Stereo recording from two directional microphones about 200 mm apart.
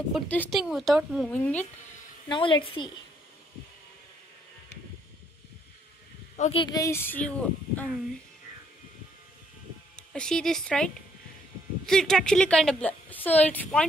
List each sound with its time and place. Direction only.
0.1 s a woman's voice: 5° left (ahead or behind)
2.2 s a woman's voice: 25° left (ahead or behind)
6.3 s speech: 35° left (ahead or behind)
6.6 s a child's voice: 15° left (ahead or behind)
9.9 s a woman's voice: 5° left (ahead or behind)